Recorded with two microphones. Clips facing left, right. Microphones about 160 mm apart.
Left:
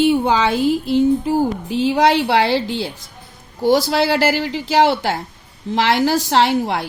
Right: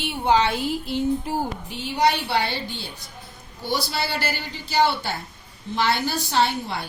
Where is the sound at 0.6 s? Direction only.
90° left.